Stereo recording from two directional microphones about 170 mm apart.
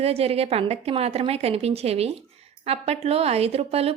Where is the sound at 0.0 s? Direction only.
35° right (ahead or behind).